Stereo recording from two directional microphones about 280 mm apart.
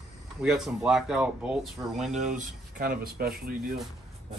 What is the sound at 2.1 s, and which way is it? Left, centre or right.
Speech, right.